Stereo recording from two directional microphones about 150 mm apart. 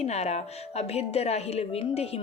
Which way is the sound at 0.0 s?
45° left (ahead or behind).